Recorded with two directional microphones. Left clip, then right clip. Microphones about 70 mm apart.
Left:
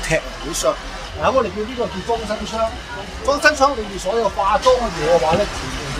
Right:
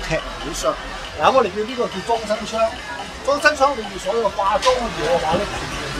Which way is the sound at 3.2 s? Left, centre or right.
Centre.